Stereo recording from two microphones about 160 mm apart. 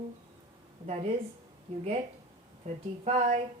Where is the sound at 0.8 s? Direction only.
40° right (ahead or behind).